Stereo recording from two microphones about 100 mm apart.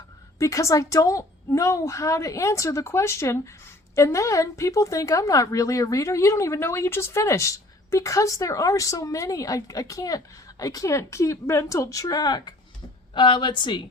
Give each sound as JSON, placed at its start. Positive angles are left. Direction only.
{"t": 0.3, "sound": "a woman's voice", "side_deg": 30}